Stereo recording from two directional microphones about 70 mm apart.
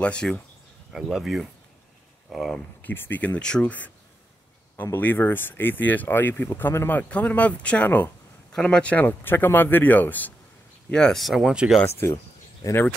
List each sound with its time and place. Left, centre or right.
0.0 s speech: centre
1.1 s speech: centre
2.8 s speech: left; by 3.7 s centre
4.9 s speech: left
10.9 s speech: centre
11.4 s speech: centre
11.8 s speech: left
12.6 s speech: left